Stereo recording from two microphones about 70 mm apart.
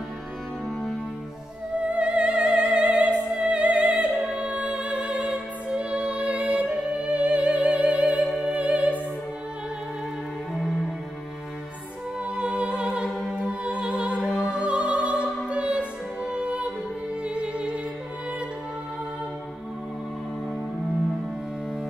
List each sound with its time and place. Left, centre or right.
1.9 s opera: centre
8.4 s music: centre
12.4 s music: centre
14.4 s opera: centre
15.4 s music: centre